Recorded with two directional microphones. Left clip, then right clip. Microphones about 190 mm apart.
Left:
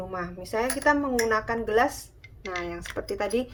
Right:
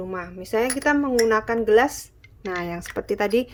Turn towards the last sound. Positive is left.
turn(degrees=-60)  # may be behind; listen again after turning